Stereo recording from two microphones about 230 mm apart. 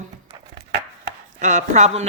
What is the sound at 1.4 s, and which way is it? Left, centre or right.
Speech, right.